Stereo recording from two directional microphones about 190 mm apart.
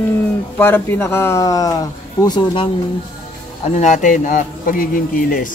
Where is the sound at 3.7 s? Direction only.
40° left (ahead or behind).